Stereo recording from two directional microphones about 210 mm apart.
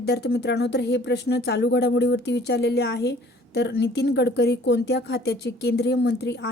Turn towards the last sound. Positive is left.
turn(degrees=55)  # may be behind; listen again after turning